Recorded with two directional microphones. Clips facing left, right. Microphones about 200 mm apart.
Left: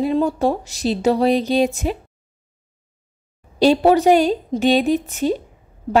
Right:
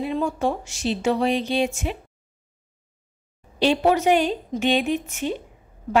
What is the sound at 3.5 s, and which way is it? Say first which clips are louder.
Speech: left 5 dB; 35° left (ahead or behind).